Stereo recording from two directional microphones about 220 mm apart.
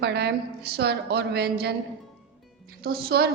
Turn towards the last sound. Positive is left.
turn(degrees=-45)  # may be behind; listen again after turning